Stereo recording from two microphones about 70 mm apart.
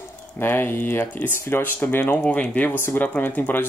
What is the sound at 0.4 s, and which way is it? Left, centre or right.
Speech, left.